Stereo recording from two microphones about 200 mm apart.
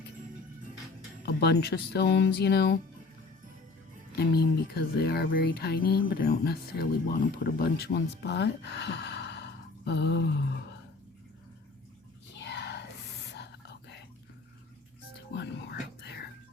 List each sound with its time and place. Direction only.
1.2 s speech: 55° left (ahead or behind)
4.1 s speech: 50° left (ahead or behind)
12.3 s a sound: 60° left (ahead or behind)
13.3 s whispering: 60° left (ahead or behind)
15.4 s whispering: 55° left (ahead or behind)